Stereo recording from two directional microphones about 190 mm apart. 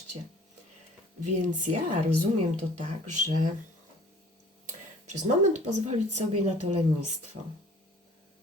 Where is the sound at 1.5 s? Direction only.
40° right (ahead or behind).